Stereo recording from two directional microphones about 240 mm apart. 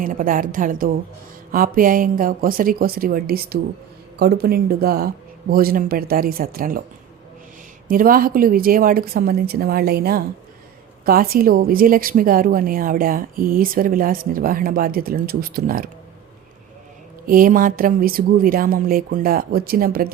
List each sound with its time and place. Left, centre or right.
0.0 s a woman's voice: right
7.9 s a woman's voice: right
17.2 s a woman's voice: right